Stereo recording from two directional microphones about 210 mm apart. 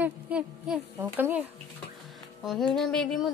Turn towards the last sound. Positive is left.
turn(degrees=5)  # may be behind; listen again after turning